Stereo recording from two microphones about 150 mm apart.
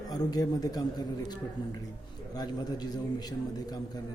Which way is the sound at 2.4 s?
30° left (ahead or behind).